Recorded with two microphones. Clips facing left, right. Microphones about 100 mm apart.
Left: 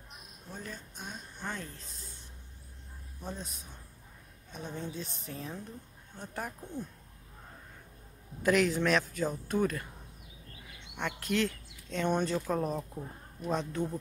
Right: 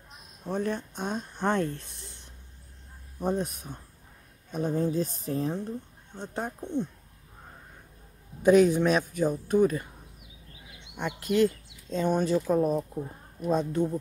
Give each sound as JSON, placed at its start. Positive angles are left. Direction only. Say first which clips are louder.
{"t": 0.5, "sound": "speech", "louder": "right 15 dB", "side_deg": -65}
{"t": 3.2, "sound": "speech", "louder": "right 13 dB", "side_deg": -55}
{"t": 4.5, "sound": "speech", "louder": "right 12 dB", "side_deg": -45}
{"t": 8.4, "sound": "speech", "louder": "right 8 dB", "side_deg": -20}
{"t": 11.0, "sound": "speech", "louder": "right 7 dB", "side_deg": -10}